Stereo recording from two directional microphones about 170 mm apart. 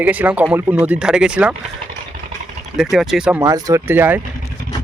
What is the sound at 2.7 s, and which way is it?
Speech, centre (ahead or behind).